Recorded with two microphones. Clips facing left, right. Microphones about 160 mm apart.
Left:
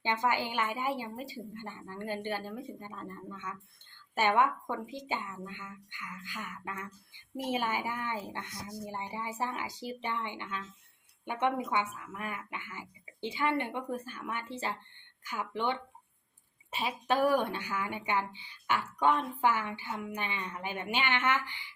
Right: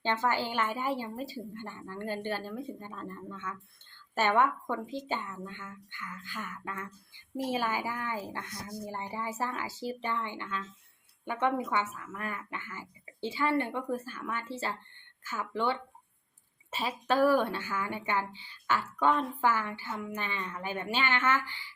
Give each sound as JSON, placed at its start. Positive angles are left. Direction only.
{"t": 0.0, "sound": "speech", "side_deg": 15}
{"t": 7.9, "sound": "speech", "side_deg": 20}